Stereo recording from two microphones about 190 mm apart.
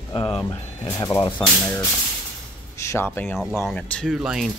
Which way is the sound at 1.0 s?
20° left (ahead or behind).